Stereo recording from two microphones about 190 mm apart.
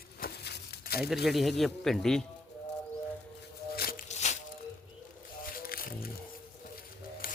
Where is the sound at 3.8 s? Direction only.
50° left (ahead or behind).